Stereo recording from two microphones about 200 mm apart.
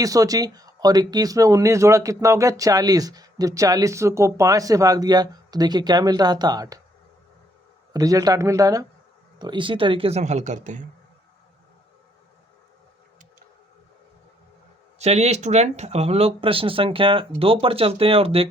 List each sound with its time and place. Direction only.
0.0 s speech: 15° right (ahead or behind)
7.9 s speech: 15° right (ahead or behind); by 10.8 s 40° right (ahead or behind)
14.9 s speech: 35° right (ahead or behind)